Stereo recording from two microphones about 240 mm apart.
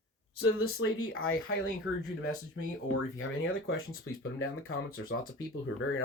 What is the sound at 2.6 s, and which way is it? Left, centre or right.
Speech, left.